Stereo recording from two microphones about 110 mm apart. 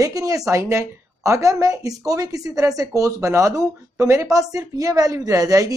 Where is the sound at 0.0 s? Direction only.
30° right (ahead or behind).